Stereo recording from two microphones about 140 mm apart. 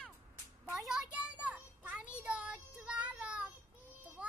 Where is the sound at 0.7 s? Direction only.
Centre (ahead or behind).